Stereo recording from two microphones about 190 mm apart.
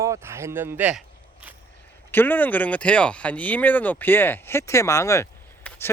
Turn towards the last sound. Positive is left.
turn(degrees=10)  # may be behind; listen again after turning